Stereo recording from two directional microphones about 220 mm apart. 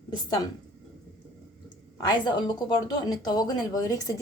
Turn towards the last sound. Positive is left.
turn(degrees=15)  # may be behind; listen again after turning